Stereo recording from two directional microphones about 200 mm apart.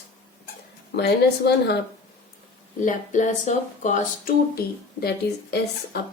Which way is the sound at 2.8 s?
40° left (ahead or behind).